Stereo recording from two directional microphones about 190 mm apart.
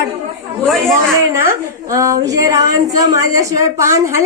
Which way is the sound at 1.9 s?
15° right (ahead or behind).